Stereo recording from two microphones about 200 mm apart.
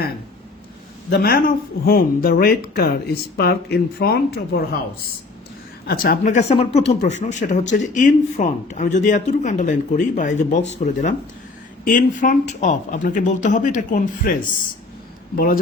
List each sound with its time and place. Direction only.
1.1 s speech: 50° left (ahead or behind)
5.8 s speech: 45° left (ahead or behind)